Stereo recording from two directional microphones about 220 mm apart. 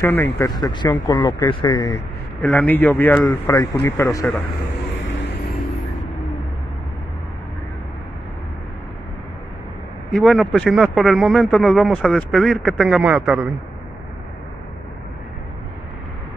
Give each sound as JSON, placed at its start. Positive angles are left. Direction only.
{"t": 0.0, "sound": "speech", "side_deg": 10}
{"t": 2.4, "sound": "speech", "side_deg": 5}
{"t": 4.9, "sound": "vehicle", "side_deg": 60}
{"t": 10.1, "sound": "speech", "side_deg": 0}